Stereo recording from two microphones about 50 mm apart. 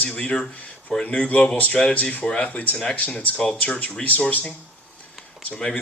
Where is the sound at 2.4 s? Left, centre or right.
Left.